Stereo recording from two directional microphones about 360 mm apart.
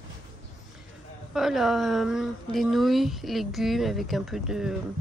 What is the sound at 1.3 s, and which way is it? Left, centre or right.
Speech, centre.